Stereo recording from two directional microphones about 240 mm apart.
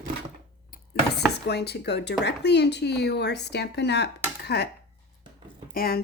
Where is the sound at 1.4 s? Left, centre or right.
Left.